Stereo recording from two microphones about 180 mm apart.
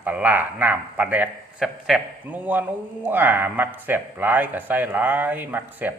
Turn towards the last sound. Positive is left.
turn(degrees=-10)  # may be behind; listen again after turning